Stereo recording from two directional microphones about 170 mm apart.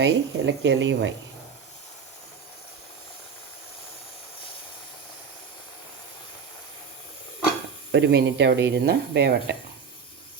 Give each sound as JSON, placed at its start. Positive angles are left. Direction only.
{"t": 0.0, "sound": "speech", "side_deg": -90}
{"t": 7.9, "sound": "speech", "side_deg": -90}